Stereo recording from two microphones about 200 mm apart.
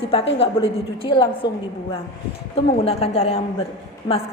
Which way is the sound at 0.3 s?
30° left (ahead or behind).